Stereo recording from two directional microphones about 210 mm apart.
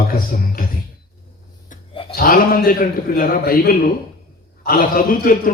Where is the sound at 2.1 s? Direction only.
45° left (ahead or behind).